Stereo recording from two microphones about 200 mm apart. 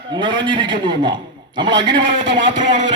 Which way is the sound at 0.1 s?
20° right (ahead or behind).